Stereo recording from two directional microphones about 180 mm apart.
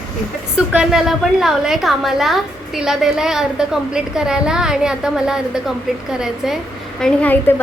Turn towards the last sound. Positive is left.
turn(degrees=10)  # may be behind; listen again after turning